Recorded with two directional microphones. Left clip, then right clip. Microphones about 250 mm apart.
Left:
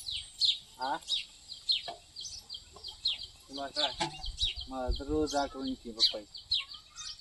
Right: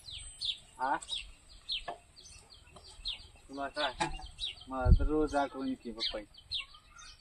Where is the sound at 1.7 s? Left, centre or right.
Centre.